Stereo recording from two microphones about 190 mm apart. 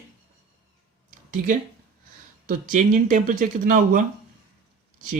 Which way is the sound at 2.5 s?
45° right (ahead or behind).